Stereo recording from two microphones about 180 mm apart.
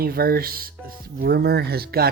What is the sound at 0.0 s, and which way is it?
Speech, 55° right (ahead or behind).